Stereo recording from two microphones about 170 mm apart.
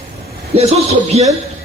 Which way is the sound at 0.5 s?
35° right (ahead or behind).